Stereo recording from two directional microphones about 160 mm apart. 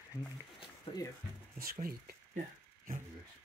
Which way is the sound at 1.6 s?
65° right (ahead or behind).